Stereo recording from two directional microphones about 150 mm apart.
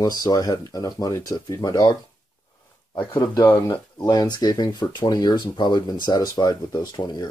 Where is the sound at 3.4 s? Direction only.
20° left (ahead or behind).